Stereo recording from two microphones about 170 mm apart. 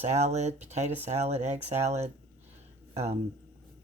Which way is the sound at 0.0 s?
40° right (ahead or behind).